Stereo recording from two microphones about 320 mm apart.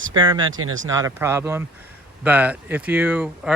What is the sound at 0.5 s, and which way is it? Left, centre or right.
Speech, right.